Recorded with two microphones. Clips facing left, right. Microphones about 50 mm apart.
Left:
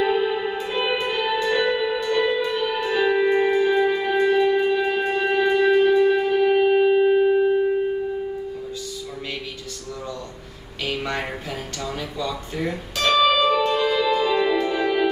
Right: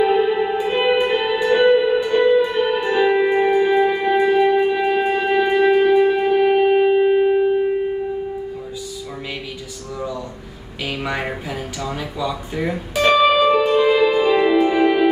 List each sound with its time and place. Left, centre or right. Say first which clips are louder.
0.0 s music: right 5 dB; centre
0.7 s music: right 7 dB; right
10.9 s a sound: right 2 dB; centre
11.8 s music: right 3 dB; centre